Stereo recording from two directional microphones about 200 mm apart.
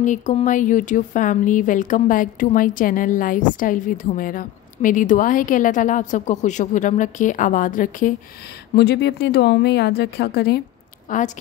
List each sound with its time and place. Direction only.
0.0 s speech: 35° left (ahead or behind)
8.7 s a woman's voice: 55° left (ahead or behind)
11.1 s a woman's voice: 40° left (ahead or behind)